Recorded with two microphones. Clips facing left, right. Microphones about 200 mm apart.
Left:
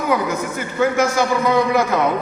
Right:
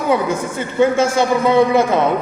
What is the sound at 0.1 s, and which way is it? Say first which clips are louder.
A man's voice: right 4 dB; 25° right (ahead or behind).